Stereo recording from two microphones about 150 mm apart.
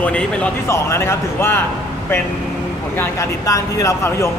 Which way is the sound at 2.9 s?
20° left (ahead or behind).